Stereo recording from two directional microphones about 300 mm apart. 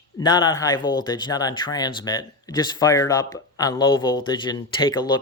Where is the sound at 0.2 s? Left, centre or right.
Centre.